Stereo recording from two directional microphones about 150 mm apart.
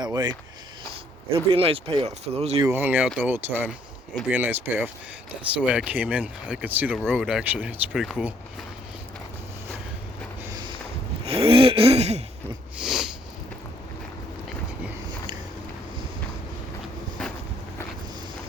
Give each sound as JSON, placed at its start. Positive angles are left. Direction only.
{"t": 0.0, "sound": "speech", "side_deg": -30}
{"t": 1.3, "sound": "speech", "side_deg": -40}
{"t": 2.6, "sound": "speech", "side_deg": -15}
{"t": 10.5, "sound": "a sound", "side_deg": -30}
{"t": 12.8, "sound": "sniff", "side_deg": -5}